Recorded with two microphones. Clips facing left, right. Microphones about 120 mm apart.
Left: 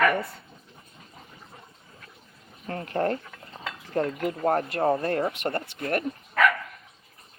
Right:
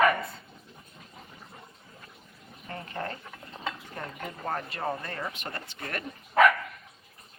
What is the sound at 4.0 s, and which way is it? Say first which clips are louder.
Speech: left 12 dB; 90° left.